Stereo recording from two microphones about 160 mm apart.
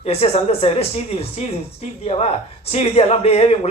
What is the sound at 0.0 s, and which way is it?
Speech, 40° left (ahead or behind).